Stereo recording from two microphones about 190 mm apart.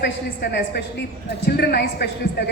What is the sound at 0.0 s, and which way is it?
A woman's voice, 55° left (ahead or behind).